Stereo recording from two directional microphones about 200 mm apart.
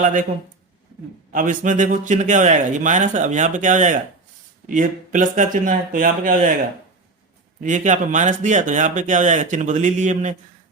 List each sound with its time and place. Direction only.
0.0 s speech: 40° right (ahead or behind)
1.3 s speech: 40° right (ahead or behind)
7.6 s speech: 40° right (ahead or behind)